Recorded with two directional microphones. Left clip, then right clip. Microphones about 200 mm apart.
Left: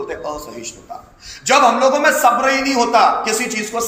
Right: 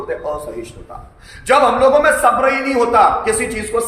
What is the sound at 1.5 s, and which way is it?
A man's voice, 20° right (ahead or behind).